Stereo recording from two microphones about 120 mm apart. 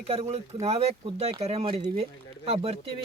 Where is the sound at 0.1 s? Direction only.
60° right (ahead or behind).